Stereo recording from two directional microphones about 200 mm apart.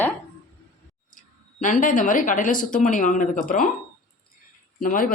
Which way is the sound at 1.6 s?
40° left (ahead or behind).